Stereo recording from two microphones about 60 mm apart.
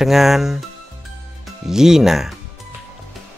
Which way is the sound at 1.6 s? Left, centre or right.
Centre.